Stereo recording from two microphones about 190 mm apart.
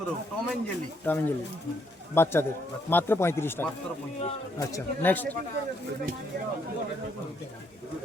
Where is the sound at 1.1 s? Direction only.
10° left (ahead or behind).